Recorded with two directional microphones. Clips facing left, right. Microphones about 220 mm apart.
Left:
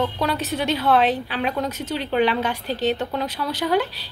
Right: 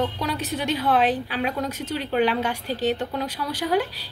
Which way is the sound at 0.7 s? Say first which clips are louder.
Left 2 dB; 10° right (ahead or behind).